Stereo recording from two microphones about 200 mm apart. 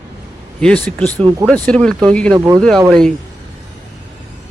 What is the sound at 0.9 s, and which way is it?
Speech, 5° left (ahead or behind).